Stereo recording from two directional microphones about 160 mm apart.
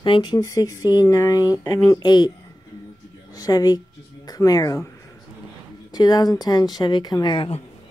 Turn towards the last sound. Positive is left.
turn(degrees=35)  # may be behind; listen again after turning